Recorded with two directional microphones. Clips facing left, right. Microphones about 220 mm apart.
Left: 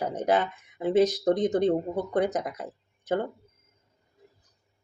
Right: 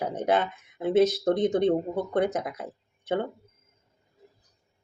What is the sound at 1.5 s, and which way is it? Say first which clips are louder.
Speech: right 1 dB; 5° right (ahead or behind).